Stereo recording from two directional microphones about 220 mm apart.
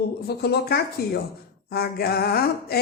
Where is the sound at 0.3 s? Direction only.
45° left (ahead or behind).